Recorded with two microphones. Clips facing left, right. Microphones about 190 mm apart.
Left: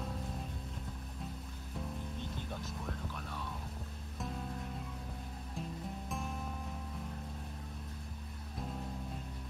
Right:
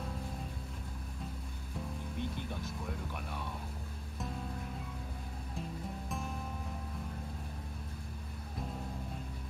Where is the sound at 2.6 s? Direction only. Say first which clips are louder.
Right 1 dB; 15° right (ahead or behind).